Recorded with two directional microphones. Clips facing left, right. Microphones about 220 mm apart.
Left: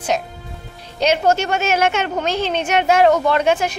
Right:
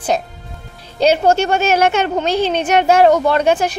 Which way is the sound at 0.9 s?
35° right (ahead or behind).